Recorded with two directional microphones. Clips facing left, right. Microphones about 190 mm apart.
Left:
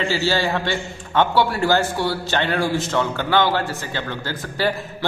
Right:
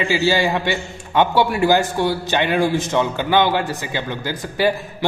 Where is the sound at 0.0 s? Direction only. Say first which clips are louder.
Right 3 dB; 15° right (ahead or behind).